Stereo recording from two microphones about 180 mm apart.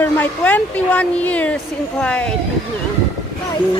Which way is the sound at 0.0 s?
10° left (ahead or behind).